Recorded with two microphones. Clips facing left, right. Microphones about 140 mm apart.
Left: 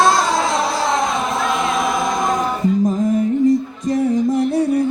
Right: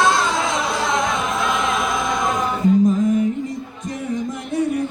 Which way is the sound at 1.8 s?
35° left (ahead or behind).